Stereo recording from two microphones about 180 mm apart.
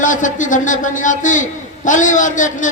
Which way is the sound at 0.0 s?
45° left (ahead or behind).